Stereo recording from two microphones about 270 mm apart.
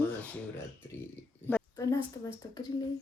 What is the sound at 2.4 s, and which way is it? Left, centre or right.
Speech, centre.